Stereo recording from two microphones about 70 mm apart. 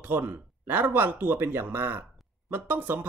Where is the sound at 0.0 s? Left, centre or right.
Right.